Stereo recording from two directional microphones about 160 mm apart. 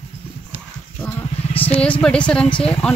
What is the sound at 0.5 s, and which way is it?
Horse, 50° left (ahead or behind).